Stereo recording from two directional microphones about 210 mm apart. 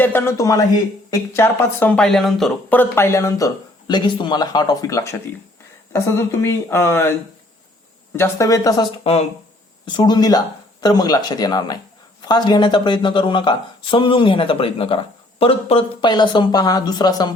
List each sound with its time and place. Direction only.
0.0 s speech: 10° left (ahead or behind)
8.1 s speech: 15° left (ahead or behind)